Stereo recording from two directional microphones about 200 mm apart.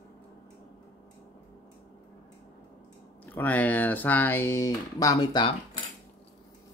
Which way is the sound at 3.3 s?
10° left (ahead or behind).